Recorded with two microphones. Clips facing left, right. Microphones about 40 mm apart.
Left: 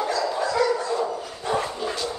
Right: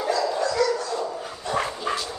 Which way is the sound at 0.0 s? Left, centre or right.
Centre.